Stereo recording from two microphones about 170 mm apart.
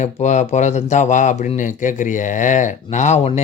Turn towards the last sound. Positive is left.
turn(degrees=45)  # may be behind; listen again after turning